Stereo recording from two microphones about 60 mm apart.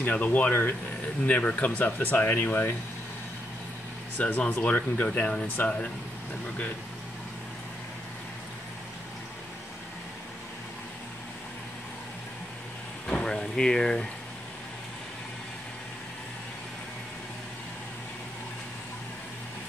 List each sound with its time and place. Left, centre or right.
0.0 s speech: left
4.2 s speech: left
13.0 s vehicle: centre